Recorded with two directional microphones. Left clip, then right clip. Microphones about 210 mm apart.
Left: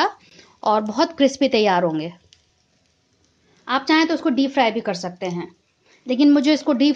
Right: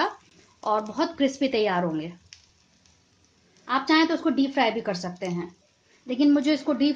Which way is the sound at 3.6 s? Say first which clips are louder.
Left 4 dB; 35° left (ahead or behind).